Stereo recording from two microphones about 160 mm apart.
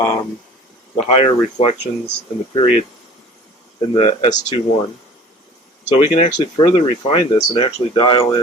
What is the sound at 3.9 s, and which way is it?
Speech, 40° left (ahead or behind).